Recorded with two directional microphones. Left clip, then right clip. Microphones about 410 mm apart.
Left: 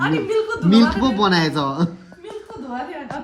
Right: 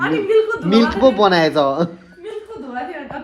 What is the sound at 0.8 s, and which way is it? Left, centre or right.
Speech, centre.